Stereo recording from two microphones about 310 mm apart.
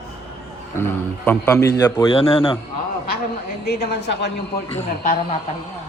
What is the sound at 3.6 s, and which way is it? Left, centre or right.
Speech, left.